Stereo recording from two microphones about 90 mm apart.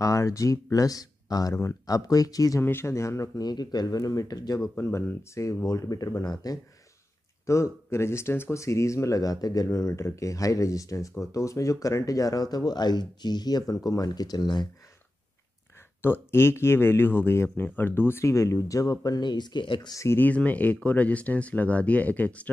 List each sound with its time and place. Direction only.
0.0 s speech: 35° left (ahead or behind)
1.5 s speech: 30° left (ahead or behind)
2.6 s speech: 30° left (ahead or behind)
3.4 s speech: 50° left (ahead or behind)
4.7 s speech: 25° left (ahead or behind); by 6.6 s 45° left (ahead or behind)
7.4 s speech: 35° left (ahead or behind); by 14.7 s 50° left (ahead or behind)
16.0 s speech: 25° left (ahead or behind); by 19.9 s 60° left (ahead or behind)
19.9 s speech: 35° left (ahead or behind)
20.2 s speech: 20° left (ahead or behind)